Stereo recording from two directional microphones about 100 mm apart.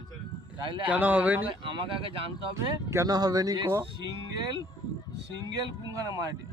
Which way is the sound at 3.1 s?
40° right (ahead or behind).